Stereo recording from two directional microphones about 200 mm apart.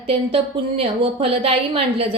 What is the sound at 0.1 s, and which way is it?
A woman's voice, 30° right (ahead or behind).